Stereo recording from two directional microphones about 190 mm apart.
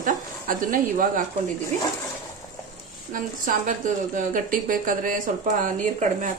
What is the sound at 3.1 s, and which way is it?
Speech, 45° right (ahead or behind).